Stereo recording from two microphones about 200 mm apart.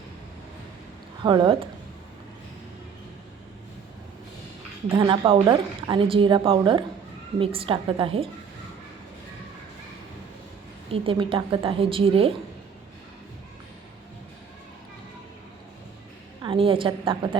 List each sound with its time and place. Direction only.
1.2 s a woman's voice: 20° right (ahead or behind)
4.9 s a woman's voice: 25° right (ahead or behind)
10.8 s a woman's voice: 25° right (ahead or behind)
16.4 s a woman's voice: 25° right (ahead or behind)